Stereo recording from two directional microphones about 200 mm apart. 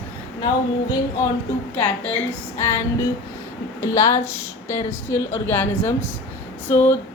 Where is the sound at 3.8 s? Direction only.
15° left (ahead or behind).